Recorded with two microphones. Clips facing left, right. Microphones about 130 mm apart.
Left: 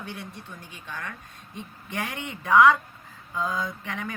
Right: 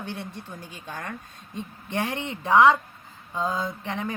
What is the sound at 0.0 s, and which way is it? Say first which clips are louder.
Speech: right 3 dB; 30° right (ahead or behind).